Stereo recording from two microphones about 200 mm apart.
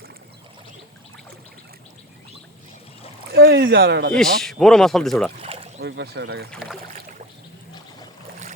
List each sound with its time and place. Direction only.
3.3 s speech: 50° right (ahead or behind)
4.1 s speech: centre (ahead or behind)
5.4 s a sound: 30° right (ahead or behind)
5.8 s speech: 55° right (ahead or behind)